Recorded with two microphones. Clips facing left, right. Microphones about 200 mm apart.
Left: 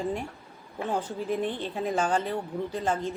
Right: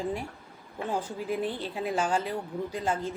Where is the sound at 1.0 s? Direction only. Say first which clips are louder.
Left 2 dB; 10° right (ahead or behind).